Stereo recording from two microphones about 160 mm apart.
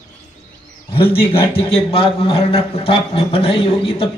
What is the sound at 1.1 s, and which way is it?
A man's voice, 35° left (ahead or behind).